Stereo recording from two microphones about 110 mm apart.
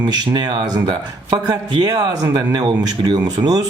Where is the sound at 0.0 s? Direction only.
45° right (ahead or behind).